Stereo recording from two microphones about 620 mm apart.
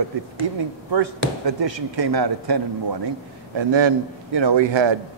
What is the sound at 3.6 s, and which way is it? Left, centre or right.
A man's voice, right.